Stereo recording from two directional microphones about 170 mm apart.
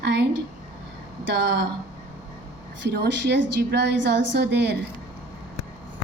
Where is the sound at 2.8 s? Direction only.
80° right.